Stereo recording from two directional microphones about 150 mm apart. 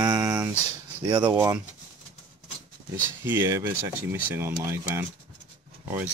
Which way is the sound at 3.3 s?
15° right (ahead or behind).